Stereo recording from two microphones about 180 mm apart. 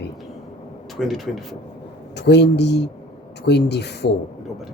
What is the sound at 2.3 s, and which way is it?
Speech, 70° left (ahead or behind).